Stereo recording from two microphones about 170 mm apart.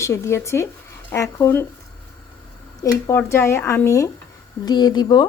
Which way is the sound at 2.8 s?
15° left (ahead or behind).